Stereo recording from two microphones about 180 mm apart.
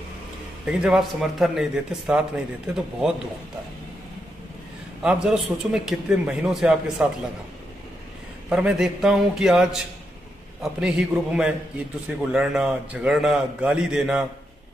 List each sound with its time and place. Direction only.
0.7 s a man's voice: 5° right (ahead or behind)
5.0 s a man's voice: 5° right (ahead or behind)
8.5 s a man's voice: 5° right (ahead or behind)